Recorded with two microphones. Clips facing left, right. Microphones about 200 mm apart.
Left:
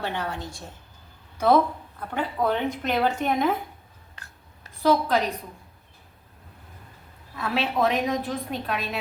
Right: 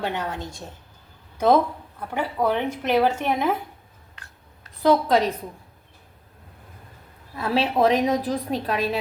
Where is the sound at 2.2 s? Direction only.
10° right (ahead or behind).